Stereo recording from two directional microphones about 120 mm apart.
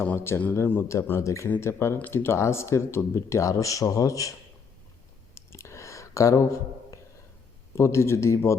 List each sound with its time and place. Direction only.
0.0 s speech: 20° left (ahead or behind)
5.3 s a sound: 25° left (ahead or behind)
7.8 s speech: 25° left (ahead or behind)